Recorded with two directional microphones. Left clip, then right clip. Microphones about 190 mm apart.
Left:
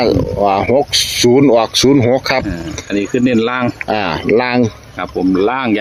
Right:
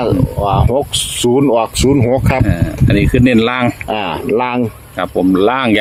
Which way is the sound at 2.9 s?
55° right (ahead or behind).